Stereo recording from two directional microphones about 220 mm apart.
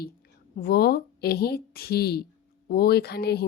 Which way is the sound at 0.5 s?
45° left (ahead or behind).